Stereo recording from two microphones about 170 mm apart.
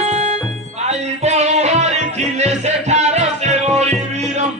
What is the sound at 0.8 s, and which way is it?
Music, 40° right (ahead or behind).